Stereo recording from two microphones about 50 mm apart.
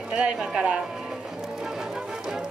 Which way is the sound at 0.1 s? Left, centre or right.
Centre.